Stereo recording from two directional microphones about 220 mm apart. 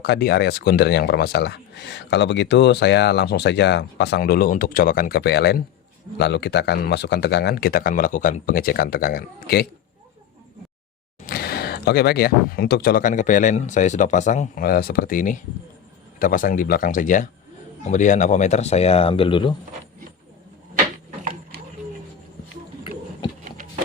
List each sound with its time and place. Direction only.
0.0 s speech: 45° left (ahead or behind)
11.3 s speech: 45° left (ahead or behind); by 19.5 s 25° left (ahead or behind)